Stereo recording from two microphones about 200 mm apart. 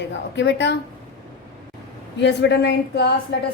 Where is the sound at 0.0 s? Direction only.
60° left (ahead or behind).